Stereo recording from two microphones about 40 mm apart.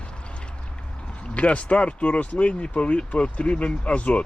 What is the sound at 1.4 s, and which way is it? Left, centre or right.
Speech, left.